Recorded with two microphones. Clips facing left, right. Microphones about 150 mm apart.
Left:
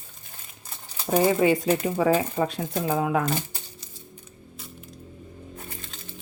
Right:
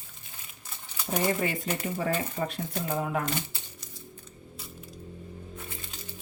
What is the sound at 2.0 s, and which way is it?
Speech, 90° left.